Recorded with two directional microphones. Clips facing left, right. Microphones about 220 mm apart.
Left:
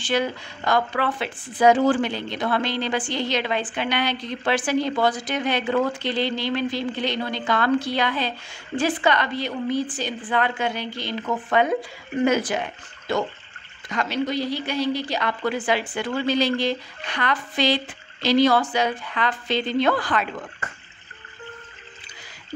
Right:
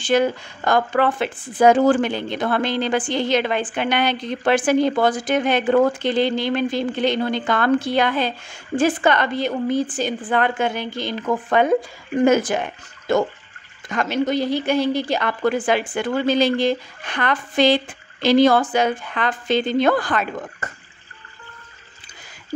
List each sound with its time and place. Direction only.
0.0 s speech: 45° right (ahead or behind)